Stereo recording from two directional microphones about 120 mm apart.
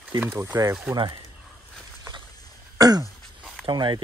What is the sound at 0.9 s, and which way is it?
Speech, 40° right (ahead or behind).